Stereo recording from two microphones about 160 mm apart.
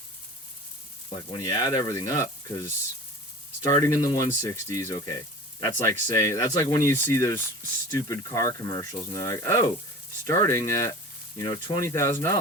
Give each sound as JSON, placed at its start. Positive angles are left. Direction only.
{"t": 1.1, "sound": "speech", "side_deg": 20}